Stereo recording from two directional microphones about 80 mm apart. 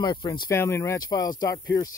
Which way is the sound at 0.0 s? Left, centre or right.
Left.